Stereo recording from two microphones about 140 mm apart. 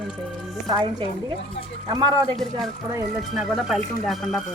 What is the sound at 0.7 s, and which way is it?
A woman's voice, 30° right (ahead or behind).